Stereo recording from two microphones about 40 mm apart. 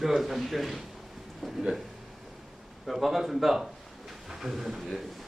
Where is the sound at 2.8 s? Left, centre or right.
Centre.